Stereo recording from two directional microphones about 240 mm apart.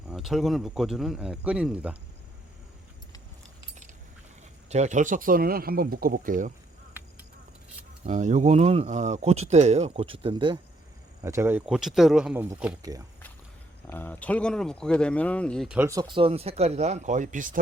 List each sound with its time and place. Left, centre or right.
0.1 s speech: centre
4.7 s speech: right
8.0 s speech: right; by 13.1 s centre
13.8 s speech: centre
15.8 s speech: centre; by 17.6 s right